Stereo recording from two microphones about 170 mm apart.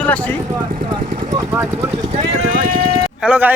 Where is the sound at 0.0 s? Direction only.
10° left (ahead or behind).